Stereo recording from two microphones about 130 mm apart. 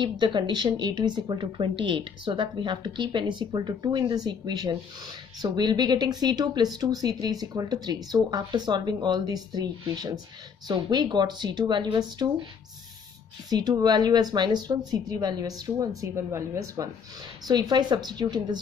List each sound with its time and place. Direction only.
0.0 s speech: 35° right (ahead or behind)
13.5 s speech: 30° right (ahead or behind)